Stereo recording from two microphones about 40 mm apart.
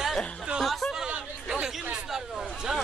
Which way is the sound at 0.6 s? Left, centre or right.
Centre.